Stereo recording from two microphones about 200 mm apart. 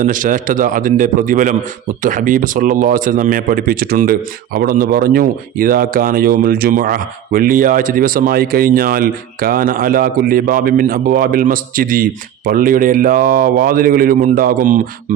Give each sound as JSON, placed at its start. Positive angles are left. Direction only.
{"t": 0.0, "sound": "a man's voice", "side_deg": -40}